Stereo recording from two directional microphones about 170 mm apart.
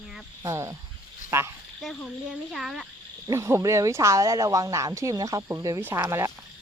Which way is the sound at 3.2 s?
15° right (ahead or behind).